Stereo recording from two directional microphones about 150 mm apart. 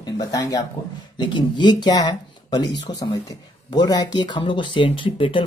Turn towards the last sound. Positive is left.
turn(degrees=35)  # may be behind; listen again after turning